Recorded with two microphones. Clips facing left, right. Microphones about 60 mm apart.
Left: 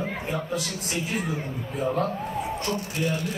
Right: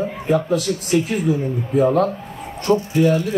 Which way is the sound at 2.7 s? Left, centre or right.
Right.